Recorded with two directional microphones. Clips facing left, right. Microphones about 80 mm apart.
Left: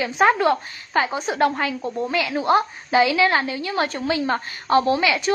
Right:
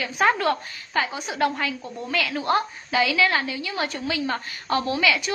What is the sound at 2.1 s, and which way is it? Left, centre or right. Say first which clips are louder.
A woman's voice: left 3 dB; left.